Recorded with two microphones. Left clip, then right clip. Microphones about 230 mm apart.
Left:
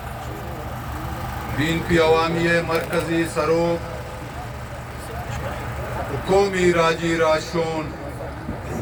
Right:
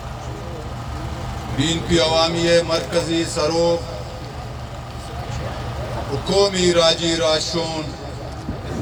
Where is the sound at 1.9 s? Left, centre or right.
Right.